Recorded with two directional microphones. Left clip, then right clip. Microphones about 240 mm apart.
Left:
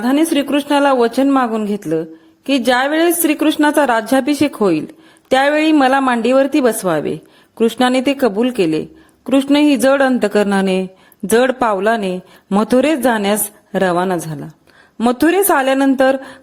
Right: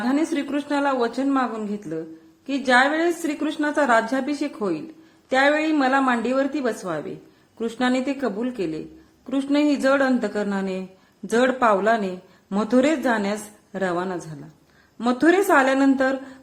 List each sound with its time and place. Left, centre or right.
0.0 s a woman's voice: left